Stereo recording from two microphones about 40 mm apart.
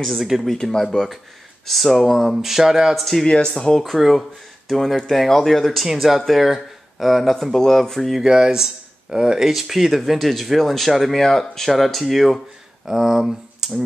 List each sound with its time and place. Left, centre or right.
0.0 s speech: centre
3.0 s speech: centre
3.3 s speech: left; by 7.3 s centre
7.3 s speech: centre
8.2 s speech: centre
9.4 s speech: centre